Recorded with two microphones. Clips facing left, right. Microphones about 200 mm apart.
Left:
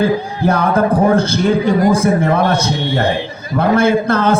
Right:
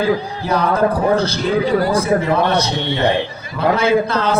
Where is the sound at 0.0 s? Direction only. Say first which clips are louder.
Left 3 dB; 50° left (ahead or behind).